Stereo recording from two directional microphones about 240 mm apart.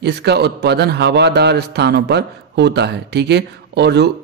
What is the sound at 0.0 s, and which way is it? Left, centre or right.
A man's voice, right.